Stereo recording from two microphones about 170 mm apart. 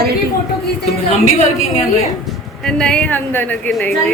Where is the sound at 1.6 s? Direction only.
40° left (ahead or behind).